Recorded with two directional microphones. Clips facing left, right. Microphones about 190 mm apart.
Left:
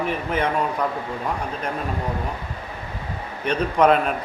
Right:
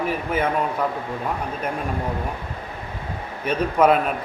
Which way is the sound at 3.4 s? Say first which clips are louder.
Even; 5° right (ahead or behind).